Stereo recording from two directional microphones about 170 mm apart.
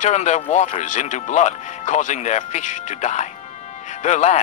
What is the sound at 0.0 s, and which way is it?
Speech, 45° left (ahead or behind).